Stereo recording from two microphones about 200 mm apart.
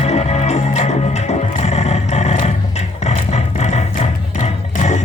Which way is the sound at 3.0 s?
35° left (ahead or behind).